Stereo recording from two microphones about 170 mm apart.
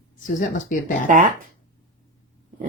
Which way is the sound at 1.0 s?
50° right (ahead or behind).